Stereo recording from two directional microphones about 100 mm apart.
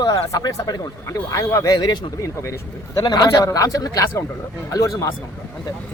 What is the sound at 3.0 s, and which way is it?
Speech, 45° left (ahead or behind).